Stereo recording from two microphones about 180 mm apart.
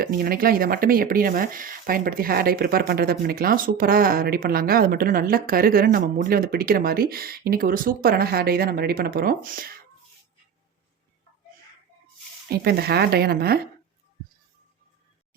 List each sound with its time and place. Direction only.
0.0 s speech: 55° right (ahead or behind)
12.5 s speech: 60° right (ahead or behind)